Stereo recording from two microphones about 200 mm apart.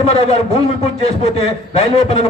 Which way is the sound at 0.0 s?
30° left (ahead or behind).